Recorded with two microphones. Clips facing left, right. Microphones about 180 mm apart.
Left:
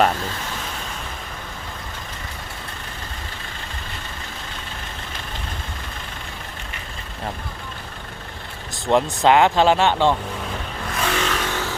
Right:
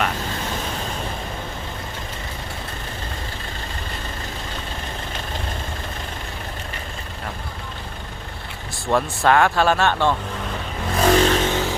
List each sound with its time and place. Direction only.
8.9 s speech: 20° left (ahead or behind)
10.9 s vehicle: 35° right (ahead or behind); by 11.8 s 20° right (ahead or behind)